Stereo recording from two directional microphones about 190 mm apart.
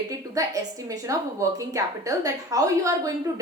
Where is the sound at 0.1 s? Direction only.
20° right (ahead or behind).